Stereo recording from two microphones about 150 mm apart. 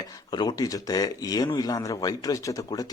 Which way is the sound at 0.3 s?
30° left (ahead or behind).